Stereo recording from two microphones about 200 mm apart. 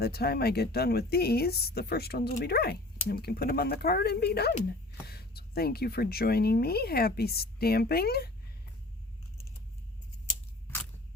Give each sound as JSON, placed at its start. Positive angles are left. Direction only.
{"t": 0.0, "sound": "speech", "side_deg": 50}